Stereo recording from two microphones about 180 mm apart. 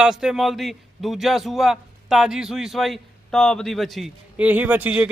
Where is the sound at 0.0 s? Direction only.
5° right (ahead or behind).